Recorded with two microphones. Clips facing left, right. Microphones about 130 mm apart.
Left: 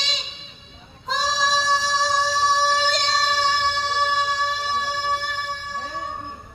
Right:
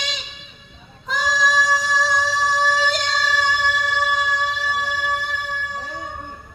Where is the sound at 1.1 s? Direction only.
30° left (ahead or behind).